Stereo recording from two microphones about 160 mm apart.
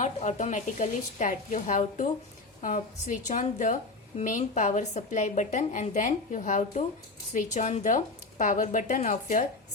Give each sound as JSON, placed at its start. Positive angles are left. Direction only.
{"t": 0.0, "sound": "a woman's voice", "side_deg": 45}